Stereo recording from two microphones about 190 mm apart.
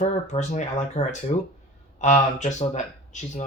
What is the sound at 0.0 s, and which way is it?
Speech, 40° left (ahead or behind).